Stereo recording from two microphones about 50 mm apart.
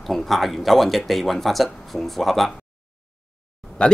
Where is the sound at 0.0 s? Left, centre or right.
Centre.